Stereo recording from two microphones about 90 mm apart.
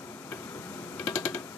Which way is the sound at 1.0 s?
20° left (ahead or behind).